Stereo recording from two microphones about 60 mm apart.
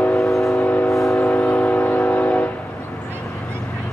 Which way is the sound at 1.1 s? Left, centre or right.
Left.